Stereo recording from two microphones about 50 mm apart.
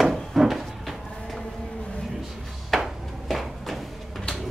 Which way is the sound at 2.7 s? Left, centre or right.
Centre.